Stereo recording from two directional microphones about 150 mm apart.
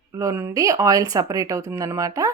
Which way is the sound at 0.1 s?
20° right (ahead or behind).